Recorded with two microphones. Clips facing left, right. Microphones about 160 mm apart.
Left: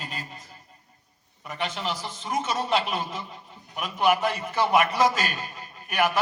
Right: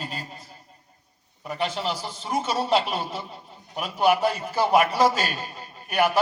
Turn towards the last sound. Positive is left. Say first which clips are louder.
# right 2 dB
turn(degrees=-35)  # may be behind; listen again after turning